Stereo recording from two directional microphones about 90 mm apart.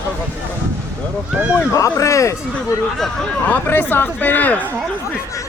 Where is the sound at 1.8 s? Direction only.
35° left (ahead or behind).